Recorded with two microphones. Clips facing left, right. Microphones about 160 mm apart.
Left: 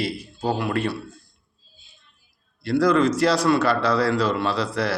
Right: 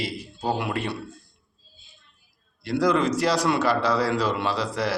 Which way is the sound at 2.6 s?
15° right (ahead or behind).